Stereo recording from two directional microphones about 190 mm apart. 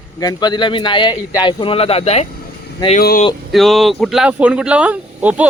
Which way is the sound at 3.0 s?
50° left (ahead or behind).